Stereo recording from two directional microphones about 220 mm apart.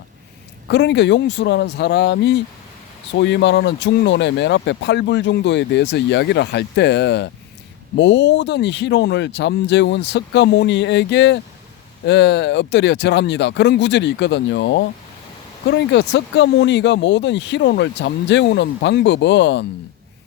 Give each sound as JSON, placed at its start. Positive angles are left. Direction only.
{"t": 0.7, "sound": "speech", "side_deg": 50}